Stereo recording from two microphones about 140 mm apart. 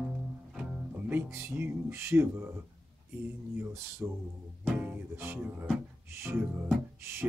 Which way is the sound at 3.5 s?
15° right (ahead or behind).